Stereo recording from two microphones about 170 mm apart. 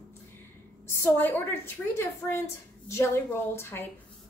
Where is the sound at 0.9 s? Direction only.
10° left (ahead or behind).